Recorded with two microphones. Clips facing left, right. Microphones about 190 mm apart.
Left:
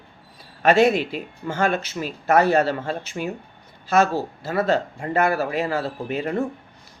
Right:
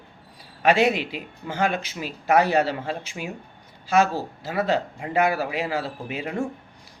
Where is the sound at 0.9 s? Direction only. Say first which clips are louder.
Left 4 dB; 45° left (ahead or behind).